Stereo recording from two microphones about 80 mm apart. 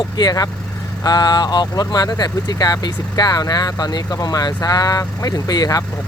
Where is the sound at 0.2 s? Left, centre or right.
Left.